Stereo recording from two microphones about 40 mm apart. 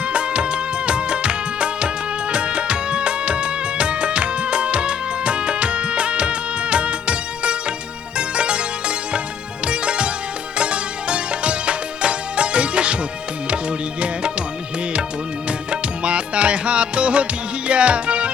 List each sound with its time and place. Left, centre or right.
0.0 s music of bollywood: right
2.3 s music: right
14.0 s music: right
15.4 s music: right